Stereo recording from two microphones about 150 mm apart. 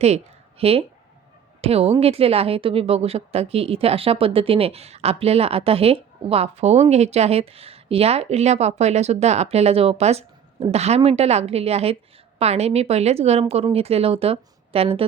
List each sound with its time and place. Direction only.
0.6 s a woman's voice: 40° right (ahead or behind)